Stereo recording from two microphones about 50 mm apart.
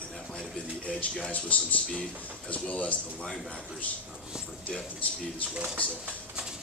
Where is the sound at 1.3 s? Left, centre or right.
Left.